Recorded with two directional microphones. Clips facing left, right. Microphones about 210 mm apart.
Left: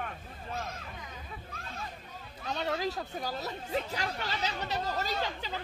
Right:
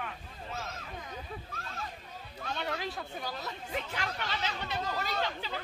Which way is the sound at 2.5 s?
30° left (ahead or behind).